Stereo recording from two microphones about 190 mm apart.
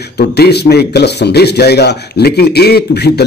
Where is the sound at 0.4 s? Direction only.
60° left (ahead or behind).